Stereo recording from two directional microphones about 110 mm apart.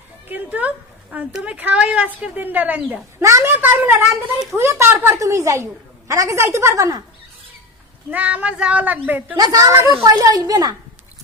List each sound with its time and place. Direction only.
0.3 s a woman's voice: 15° right (ahead or behind)
3.2 s a woman's voice: 25° right (ahead or behind)
8.1 s a woman's voice: 15° right (ahead or behind)
9.3 s a child's voice: 35° right (ahead or behind)